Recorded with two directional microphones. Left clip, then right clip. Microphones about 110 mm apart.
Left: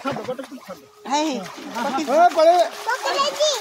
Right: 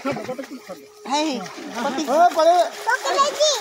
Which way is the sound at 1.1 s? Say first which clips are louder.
Even; 20° right (ahead or behind).